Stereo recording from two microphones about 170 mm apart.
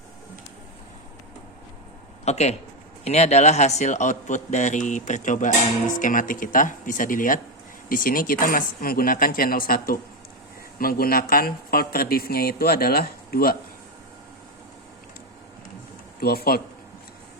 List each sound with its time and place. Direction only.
2.2 s a man's voice: 40° left (ahead or behind); by 13.6 s 60° left (ahead or behind)
16.2 s speech: 65° left (ahead or behind)